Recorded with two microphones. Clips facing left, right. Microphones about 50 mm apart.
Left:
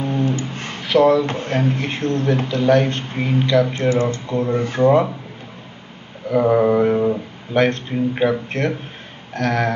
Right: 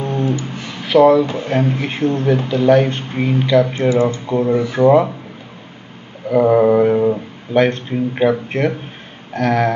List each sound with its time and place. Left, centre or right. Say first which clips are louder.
0.4 s a sound: even; left
0.8 s speech: right 4 dB; centre
6.3 s speech: right 3 dB; centre